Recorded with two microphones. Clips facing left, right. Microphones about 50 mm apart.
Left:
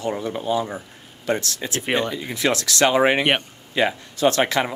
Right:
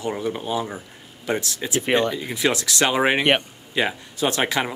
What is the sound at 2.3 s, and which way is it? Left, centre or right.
Speech, centre.